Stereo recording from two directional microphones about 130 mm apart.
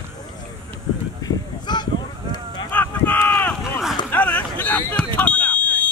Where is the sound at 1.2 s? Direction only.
35° left (ahead or behind).